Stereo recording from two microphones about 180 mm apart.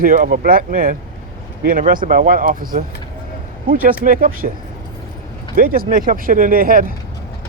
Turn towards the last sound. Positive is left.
turn(degrees=-50)  # may be behind; listen again after turning